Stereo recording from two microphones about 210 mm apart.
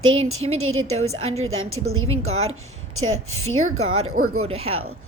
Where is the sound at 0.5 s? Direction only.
80° right.